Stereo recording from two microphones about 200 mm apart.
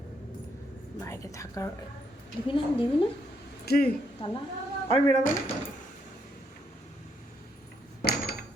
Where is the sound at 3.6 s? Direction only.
50° left (ahead or behind).